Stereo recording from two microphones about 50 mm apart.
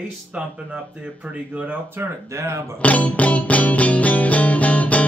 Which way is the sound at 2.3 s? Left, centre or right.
Right.